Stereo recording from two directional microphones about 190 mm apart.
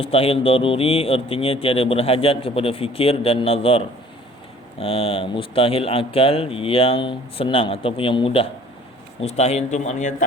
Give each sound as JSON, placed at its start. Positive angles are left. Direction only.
{"t": 0.0, "sound": "speech", "side_deg": 30}